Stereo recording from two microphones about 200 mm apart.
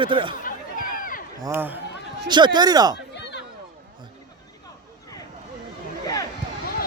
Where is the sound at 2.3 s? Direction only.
20° right (ahead or behind).